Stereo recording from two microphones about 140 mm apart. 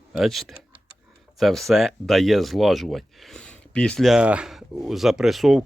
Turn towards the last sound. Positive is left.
turn(degrees=0)  # may be behind; listen again after turning